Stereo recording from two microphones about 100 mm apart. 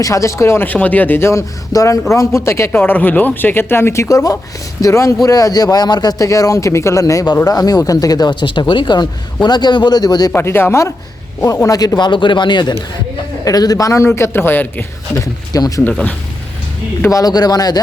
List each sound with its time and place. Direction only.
0.0 s speech: 30° left (ahead or behind)
10.3 s a man's voice: 20° left (ahead or behind)
15.1 s speech: 35° left (ahead or behind)
17.1 s speech: 35° left (ahead or behind)